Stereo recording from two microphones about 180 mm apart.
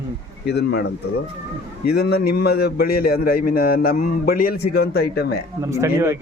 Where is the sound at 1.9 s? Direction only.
60° left (ahead or behind).